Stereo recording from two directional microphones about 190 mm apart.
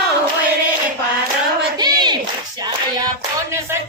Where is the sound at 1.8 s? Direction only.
20° right (ahead or behind).